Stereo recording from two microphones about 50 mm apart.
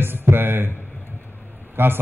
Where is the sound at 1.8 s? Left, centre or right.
Right.